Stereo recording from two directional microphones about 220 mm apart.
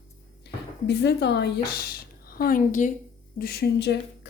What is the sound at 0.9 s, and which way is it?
A woman's voice, 50° left (ahead or behind).